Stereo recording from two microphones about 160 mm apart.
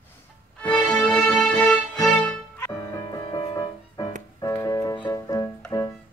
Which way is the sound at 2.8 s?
20° left (ahead or behind).